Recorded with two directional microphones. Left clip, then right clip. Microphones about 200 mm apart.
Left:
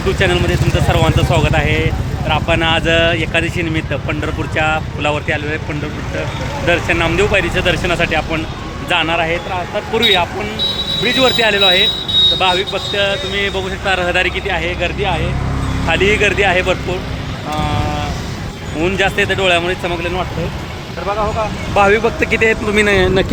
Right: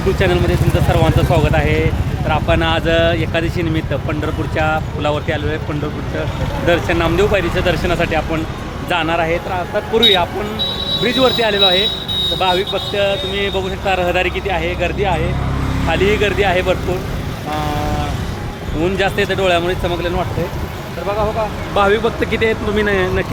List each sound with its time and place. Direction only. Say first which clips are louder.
0.2 s speech: left 1 dB; centre (ahead or behind)
6.7 s speech: left 1 dB; 5° right (ahead or behind); by 16.7 s 10° left (ahead or behind)
18.8 s speech: left 2 dB; 10° left (ahead or behind)
21.8 s speech: left 2 dB; 20° left (ahead or behind)